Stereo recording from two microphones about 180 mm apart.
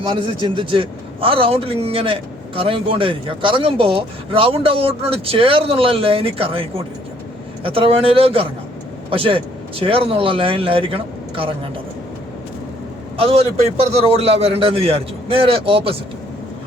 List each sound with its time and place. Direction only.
0.2 s a man's voice: 25° right (ahead or behind)
13.1 s a man's voice: 35° right (ahead or behind)